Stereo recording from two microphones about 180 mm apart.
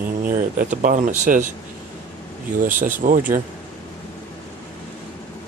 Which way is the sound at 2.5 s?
45° right (ahead or behind).